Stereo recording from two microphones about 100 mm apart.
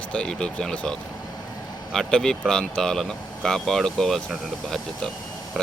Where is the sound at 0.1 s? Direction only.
5° left (ahead or behind).